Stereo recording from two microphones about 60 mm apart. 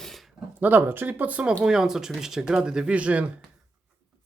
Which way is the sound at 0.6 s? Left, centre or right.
Right.